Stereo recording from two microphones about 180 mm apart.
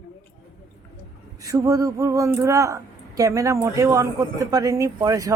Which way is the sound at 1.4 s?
20° right (ahead or behind).